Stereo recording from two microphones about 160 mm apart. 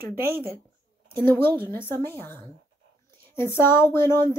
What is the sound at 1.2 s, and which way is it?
Speech, 15° left (ahead or behind).